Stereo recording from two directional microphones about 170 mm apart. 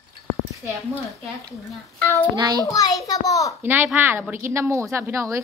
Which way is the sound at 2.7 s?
20° left (ahead or behind).